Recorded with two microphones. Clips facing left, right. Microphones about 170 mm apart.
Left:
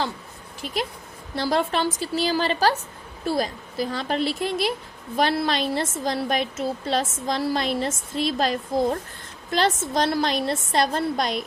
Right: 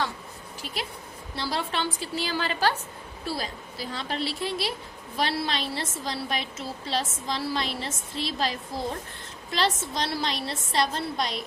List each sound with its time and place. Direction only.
1.4 s a woman's voice: 45° left (ahead or behind)